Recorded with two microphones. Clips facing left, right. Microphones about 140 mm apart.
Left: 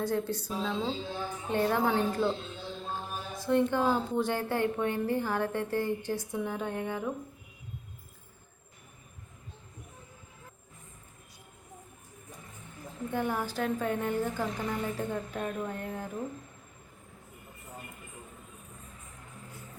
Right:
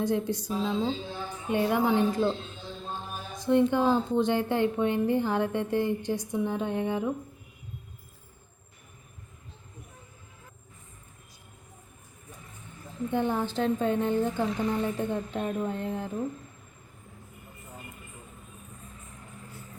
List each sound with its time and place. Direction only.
0.0 s a woman's voice: 15° right (ahead or behind)
13.1 s speech: 25° right (ahead or behind)